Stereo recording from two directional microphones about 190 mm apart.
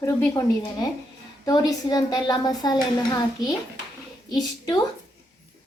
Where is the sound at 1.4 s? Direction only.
20° left (ahead or behind).